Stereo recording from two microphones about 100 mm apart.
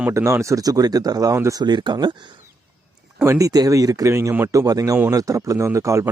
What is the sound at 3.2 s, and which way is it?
Speech, 30° right (ahead or behind).